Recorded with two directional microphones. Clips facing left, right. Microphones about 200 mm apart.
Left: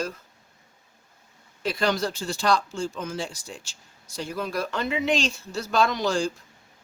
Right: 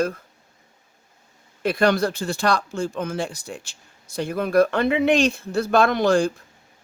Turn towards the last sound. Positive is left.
turn(degrees=-55)  # may be behind; listen again after turning